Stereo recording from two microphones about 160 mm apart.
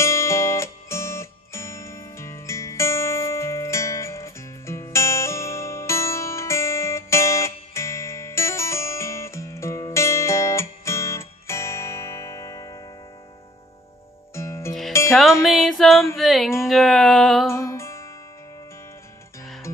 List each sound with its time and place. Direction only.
0.0 s music: 15° left (ahead or behind)
14.3 s music: 15° left (ahead or behind)
15.0 s music: centre (ahead or behind)
15.4 s a sound: centre (ahead or behind)
17.5 s music: 15° left (ahead or behind)